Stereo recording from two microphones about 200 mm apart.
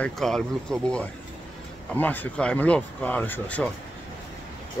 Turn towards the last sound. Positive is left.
turn(degrees=5)  # may be behind; listen again after turning